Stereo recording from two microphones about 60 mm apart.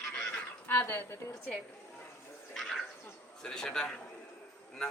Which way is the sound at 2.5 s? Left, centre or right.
Centre.